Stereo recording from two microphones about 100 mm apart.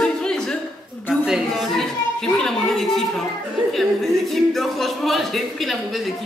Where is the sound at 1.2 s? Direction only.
5° right (ahead or behind).